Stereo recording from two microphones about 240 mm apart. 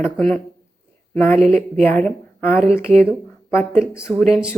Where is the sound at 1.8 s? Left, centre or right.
Centre.